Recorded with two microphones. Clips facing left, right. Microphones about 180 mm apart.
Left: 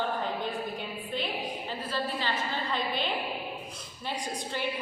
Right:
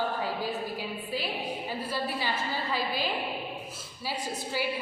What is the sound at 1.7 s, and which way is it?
A woman's voice, 10° right (ahead or behind).